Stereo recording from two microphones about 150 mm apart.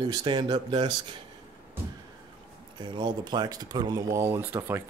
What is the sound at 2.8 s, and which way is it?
Speech, 30° right (ahead or behind).